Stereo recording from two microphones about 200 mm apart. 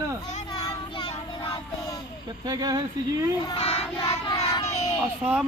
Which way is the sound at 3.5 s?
30° left (ahead or behind).